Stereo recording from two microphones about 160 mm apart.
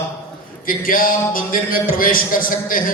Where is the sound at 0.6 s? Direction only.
60° left (ahead or behind).